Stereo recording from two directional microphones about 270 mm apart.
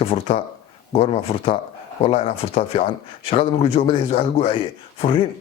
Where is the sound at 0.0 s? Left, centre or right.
Left.